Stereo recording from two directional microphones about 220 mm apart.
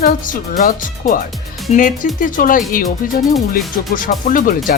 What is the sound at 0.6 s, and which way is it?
Speech, 35° left (ahead or behind).